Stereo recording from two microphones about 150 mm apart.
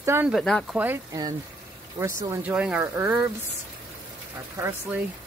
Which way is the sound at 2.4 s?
10° right (ahead or behind).